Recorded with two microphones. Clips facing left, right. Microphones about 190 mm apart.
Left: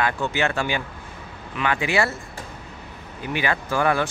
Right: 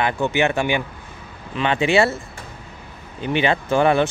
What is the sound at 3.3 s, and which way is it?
Speech, 25° right (ahead or behind).